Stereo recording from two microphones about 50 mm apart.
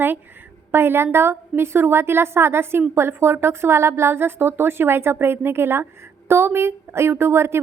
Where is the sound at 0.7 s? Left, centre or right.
Right.